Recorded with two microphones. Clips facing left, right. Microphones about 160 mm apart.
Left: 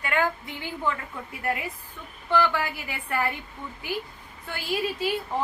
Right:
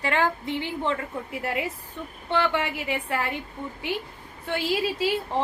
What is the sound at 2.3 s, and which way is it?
Speech, 25° right (ahead or behind).